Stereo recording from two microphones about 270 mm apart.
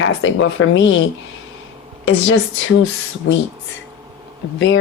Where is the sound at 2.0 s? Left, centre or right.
Left.